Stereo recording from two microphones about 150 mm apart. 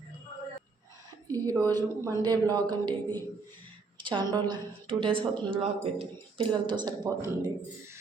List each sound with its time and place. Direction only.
1.3 s a woman's voice: 25° right (ahead or behind)
3.9 s a woman's voice: 35° right (ahead or behind)